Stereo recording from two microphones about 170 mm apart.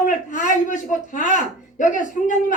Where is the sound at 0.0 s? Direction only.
50° left (ahead or behind).